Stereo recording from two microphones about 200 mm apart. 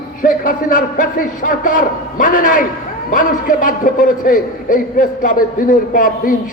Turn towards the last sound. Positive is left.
turn(degrees=40)  # may be behind; listen again after turning